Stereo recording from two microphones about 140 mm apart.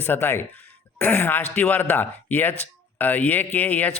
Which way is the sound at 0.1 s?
15° left (ahead or behind).